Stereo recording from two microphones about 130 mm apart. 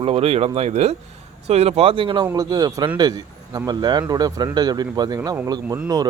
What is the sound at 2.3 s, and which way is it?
Speech, 30° right (ahead or behind).